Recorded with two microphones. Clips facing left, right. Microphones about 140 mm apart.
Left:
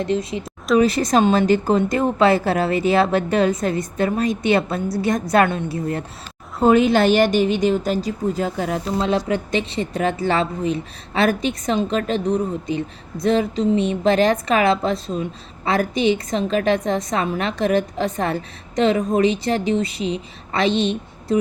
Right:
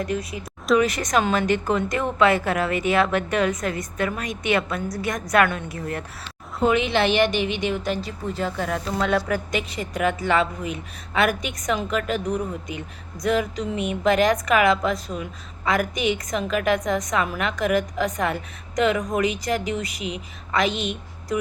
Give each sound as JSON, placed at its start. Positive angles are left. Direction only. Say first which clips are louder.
{"t": 0.0, "sound": "a woman's voice", "louder": "left 5 dB", "side_deg": 25}
{"t": 6.6, "sound": "a woman's voice", "louder": "left 6 dB", "side_deg": 40}
{"t": 9.0, "sound": "a woman's voice", "louder": "left 2 dB", "side_deg": 25}